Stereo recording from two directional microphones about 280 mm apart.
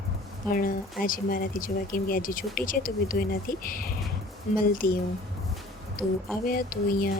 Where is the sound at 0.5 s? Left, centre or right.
Left.